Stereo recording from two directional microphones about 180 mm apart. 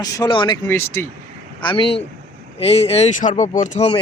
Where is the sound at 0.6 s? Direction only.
15° left (ahead or behind).